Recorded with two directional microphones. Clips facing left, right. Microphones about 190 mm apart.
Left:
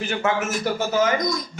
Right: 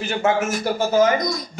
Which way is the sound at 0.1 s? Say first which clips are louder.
Right 4 dB; 35° right (ahead or behind).